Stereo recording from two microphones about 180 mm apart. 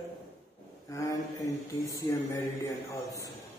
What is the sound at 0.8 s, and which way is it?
Mantra, 20° left (ahead or behind).